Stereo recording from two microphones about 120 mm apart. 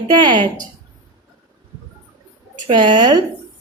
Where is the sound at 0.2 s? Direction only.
40° right (ahead or behind).